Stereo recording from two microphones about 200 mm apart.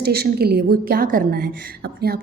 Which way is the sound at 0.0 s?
50° right (ahead or behind).